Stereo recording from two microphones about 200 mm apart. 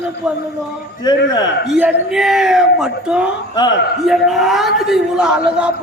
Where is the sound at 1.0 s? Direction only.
20° left (ahead or behind).